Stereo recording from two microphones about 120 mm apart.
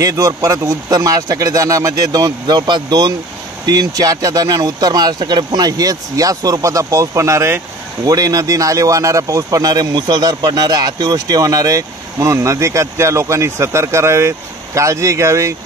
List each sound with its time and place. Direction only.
0.0 s speech: 30° right (ahead or behind)